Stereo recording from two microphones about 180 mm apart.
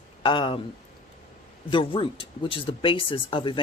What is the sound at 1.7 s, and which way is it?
A woman's voice, 30° left (ahead or behind).